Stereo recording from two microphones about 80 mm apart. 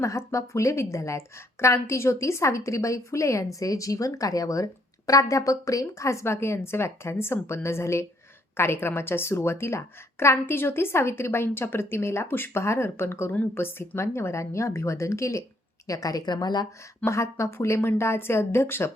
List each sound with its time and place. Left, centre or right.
0.0 s a woman's voice: left
15.9 s a woman's voice: left
17.1 s a woman's voice: left